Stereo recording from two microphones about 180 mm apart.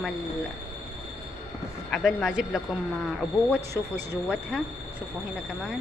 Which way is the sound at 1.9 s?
Centre (ahead or behind).